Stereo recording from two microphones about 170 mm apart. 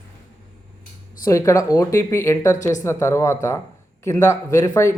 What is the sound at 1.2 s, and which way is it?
Speech, 20° left (ahead or behind).